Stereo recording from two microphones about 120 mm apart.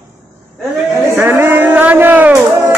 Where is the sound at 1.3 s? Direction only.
20° right (ahead or behind).